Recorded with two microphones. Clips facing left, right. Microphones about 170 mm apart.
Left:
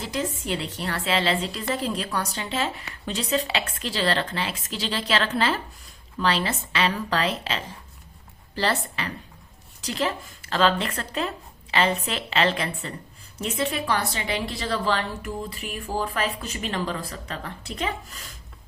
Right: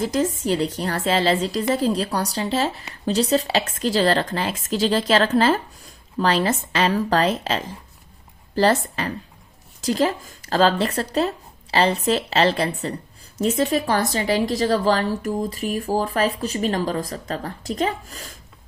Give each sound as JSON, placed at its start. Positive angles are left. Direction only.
{"t": 0.0, "sound": "speech", "side_deg": -40}